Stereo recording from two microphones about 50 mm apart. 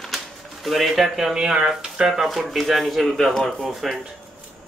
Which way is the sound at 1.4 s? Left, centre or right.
Centre.